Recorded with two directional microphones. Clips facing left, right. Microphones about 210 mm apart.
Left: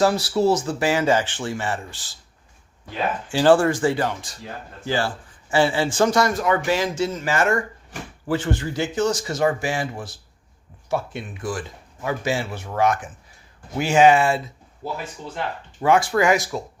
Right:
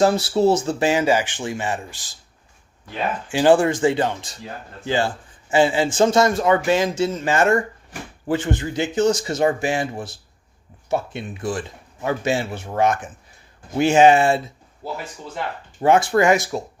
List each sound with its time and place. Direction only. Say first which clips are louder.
0.0 s speech: right 2 dB; 25° right (ahead or behind)
3.3 s speech: right 1 dB; 15° right (ahead or behind)
15.8 s speech: right 2 dB; 25° right (ahead or behind)